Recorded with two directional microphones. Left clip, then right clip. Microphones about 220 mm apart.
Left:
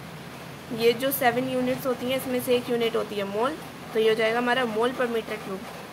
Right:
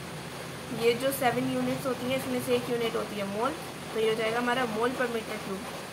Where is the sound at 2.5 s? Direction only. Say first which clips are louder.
Left 4 dB; 45° left (ahead or behind).